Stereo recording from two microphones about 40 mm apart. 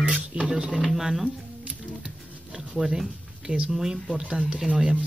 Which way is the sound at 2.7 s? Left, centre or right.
Centre.